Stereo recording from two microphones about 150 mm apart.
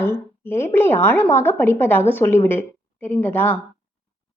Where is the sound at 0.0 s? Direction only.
15° left (ahead or behind).